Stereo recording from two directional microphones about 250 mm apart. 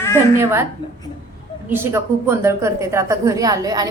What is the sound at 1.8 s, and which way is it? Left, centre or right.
A woman's voice, centre.